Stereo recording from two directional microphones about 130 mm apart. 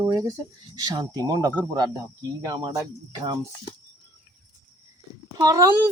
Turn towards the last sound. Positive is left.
turn(degrees=-25)  # may be behind; listen again after turning